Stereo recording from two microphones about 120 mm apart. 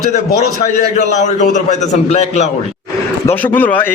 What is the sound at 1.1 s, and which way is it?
A man's voice, 80° left.